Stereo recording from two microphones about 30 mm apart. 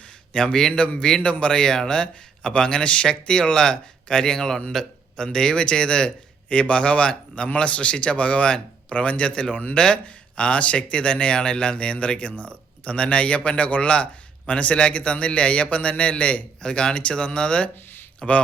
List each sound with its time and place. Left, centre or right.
0.3 s speech: left
1.2 s speech: left
5.5 s speech: left
16.6 s speech: left
18.2 s speech: left